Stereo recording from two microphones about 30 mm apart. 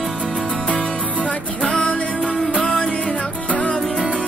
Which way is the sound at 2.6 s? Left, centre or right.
Left.